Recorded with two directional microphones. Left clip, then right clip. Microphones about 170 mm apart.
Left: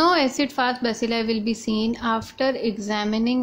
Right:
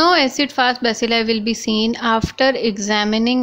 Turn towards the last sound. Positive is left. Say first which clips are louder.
# right 7 dB
turn(degrees=-15)  # may be behind; listen again after turning